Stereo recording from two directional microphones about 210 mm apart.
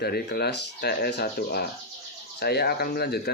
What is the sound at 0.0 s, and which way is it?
Speech, 50° left (ahead or behind).